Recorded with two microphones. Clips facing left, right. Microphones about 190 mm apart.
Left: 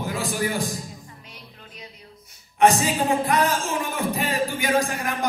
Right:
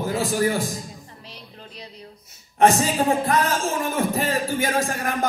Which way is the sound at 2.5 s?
40° right (ahead or behind).